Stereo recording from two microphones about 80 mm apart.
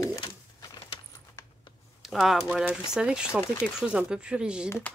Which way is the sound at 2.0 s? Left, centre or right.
Centre.